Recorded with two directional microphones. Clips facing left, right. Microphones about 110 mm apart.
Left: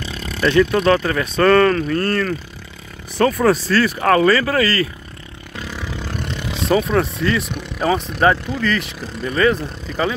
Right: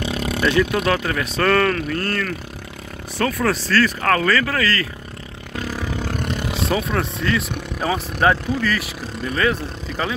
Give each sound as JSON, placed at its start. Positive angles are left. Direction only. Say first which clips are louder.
{"t": 0.0, "sound": "vehicle", "louder": "right 5 dB", "side_deg": -65}
{"t": 0.4, "sound": "speech", "louder": "left 4 dB", "side_deg": -10}
{"t": 3.2, "sound": "speech", "louder": "left 5 dB", "side_deg": 20}
{"t": 5.6, "sound": "vehicle", "louder": "right 3 dB", "side_deg": -40}
{"t": 6.6, "sound": "speech", "louder": "left 6 dB", "side_deg": 0}